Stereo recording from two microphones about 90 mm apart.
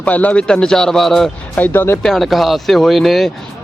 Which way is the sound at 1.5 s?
20° left (ahead or behind).